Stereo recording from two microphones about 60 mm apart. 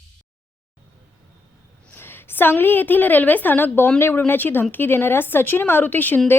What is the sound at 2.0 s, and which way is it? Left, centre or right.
A woman's voice, left.